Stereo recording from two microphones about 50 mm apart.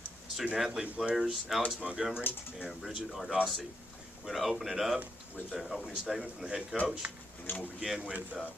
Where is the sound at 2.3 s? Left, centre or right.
Left.